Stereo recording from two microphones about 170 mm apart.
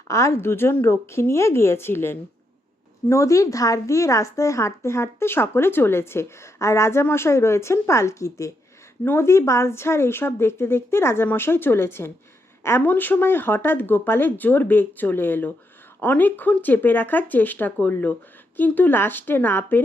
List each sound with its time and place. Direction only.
0.1 s speech: 15° left (ahead or behind)